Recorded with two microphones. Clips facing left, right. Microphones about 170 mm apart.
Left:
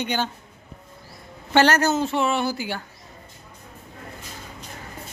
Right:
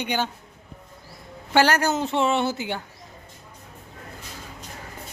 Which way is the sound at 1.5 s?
10° right (ahead or behind).